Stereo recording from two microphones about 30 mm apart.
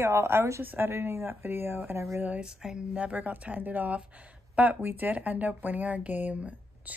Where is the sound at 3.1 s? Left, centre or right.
Right.